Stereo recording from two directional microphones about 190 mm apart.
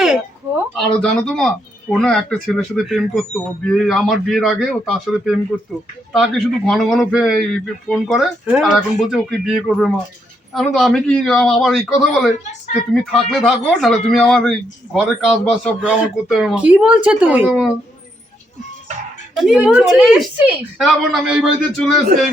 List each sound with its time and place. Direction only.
0.8 s speech: 5° left (ahead or behind)
19.4 s speech: 5° right (ahead or behind)